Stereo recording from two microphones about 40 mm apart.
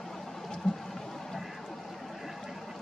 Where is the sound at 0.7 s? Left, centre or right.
Centre.